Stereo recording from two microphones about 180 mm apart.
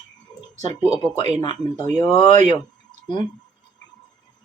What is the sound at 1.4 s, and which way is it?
Speech, 20° left (ahead or behind).